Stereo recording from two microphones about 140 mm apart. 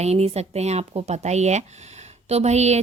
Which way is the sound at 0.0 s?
50° right (ahead or behind).